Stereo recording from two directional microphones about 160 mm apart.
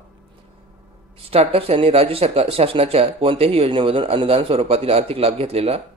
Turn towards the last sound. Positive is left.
turn(degrees=-40)  # may be behind; listen again after turning